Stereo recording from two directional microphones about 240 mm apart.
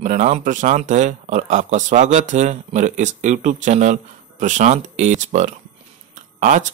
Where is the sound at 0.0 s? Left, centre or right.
Right.